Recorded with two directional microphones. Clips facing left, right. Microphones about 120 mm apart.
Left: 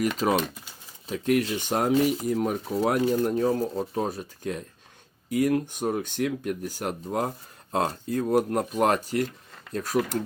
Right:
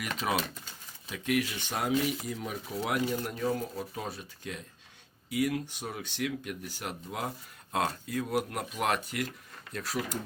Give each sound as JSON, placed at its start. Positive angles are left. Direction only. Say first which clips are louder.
{"t": 0.0, "sound": "speech", "louder": "left 8 dB", "side_deg": 40}
{"t": 2.7, "sound": "speech", "louder": "left 7 dB", "side_deg": 40}